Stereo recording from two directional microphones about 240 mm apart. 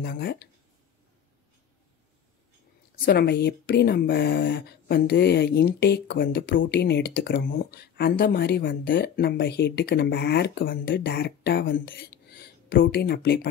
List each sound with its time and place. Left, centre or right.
0.0 s speech: left
3.1 s speech: left